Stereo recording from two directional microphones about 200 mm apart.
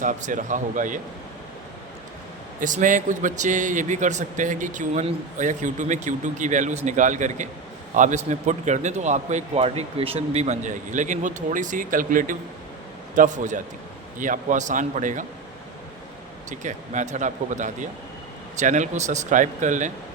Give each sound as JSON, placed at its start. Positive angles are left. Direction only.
{"t": 0.0, "sound": "speech", "side_deg": -40}
{"t": 2.6, "sound": "speech", "side_deg": -40}
{"t": 16.5, "sound": "speech", "side_deg": -40}